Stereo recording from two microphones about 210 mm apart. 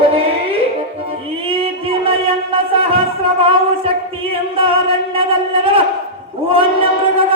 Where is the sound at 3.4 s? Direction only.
25° right (ahead or behind).